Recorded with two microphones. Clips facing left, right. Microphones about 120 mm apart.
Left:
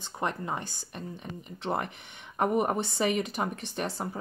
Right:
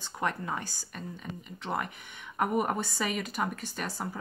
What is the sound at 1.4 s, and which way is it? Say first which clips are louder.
Speech: left 3 dB; 35° left (ahead or behind).